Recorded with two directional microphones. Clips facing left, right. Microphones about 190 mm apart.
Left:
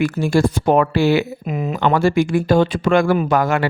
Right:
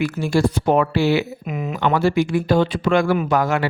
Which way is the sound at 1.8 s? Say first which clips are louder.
Left 2 dB; 50° left (ahead or behind).